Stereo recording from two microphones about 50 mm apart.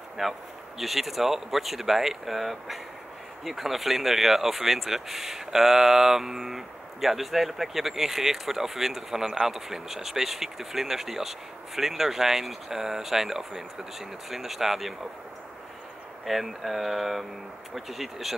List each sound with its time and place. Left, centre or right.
0.2 s speech: centre
9.2 s speech: centre
9.5 s speech: centre
16.3 s speech: centre